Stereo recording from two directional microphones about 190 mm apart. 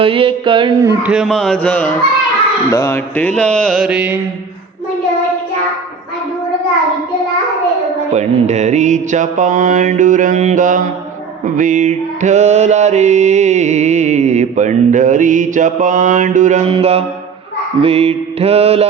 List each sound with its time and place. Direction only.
0.0 s a sound: 30° right (ahead or behind)
1.0 s music: 5° right (ahead or behind)
8.1 s mantra: 35° right (ahead or behind)